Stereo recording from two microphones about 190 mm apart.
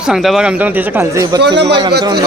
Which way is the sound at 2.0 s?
20° right (ahead or behind).